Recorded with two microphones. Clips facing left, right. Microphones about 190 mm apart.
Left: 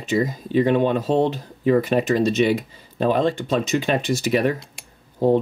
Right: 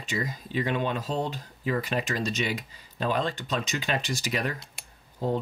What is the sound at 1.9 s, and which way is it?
Speech, 45° left (ahead or behind).